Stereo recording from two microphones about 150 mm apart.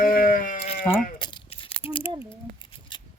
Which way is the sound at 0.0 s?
70° left (ahead or behind).